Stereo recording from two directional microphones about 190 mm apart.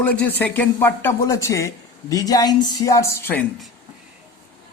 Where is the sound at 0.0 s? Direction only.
10° left (ahead or behind).